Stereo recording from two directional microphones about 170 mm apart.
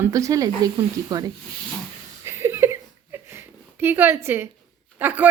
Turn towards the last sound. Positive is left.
turn(degrees=-10)  # may be behind; listen again after turning